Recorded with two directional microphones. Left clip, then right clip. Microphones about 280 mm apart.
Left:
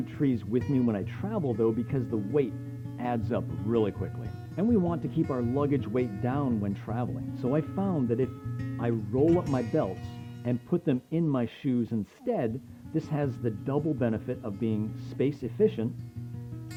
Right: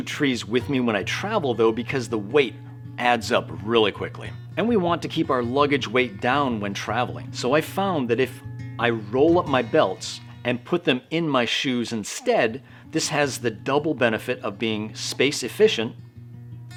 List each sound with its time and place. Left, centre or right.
0.0 s speech: centre
9.2 s speech: centre
9.5 s speech: centre